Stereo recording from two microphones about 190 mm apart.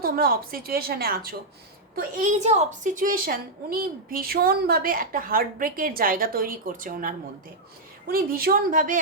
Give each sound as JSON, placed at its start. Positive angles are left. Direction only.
{"t": 0.0, "sound": "a woman's voice", "side_deg": -50}